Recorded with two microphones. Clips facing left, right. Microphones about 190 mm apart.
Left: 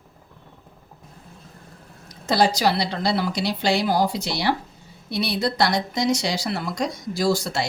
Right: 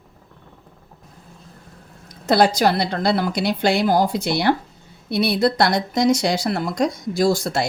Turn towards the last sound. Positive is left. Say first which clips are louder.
# right 3 dB
turn(degrees=-50)  # may be behind; listen again after turning